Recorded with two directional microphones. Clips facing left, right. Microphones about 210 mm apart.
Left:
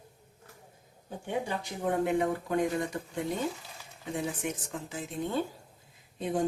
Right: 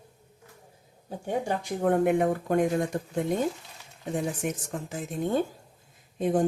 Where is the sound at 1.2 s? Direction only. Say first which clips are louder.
Right 4 dB; 50° right (ahead or behind).